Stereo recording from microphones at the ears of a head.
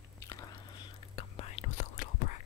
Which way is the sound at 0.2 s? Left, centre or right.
Left.